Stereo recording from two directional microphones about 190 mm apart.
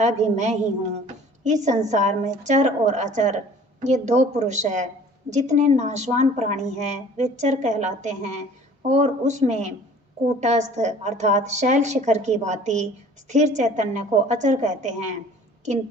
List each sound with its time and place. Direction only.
0.0 s a woman's voice: 40° right (ahead or behind)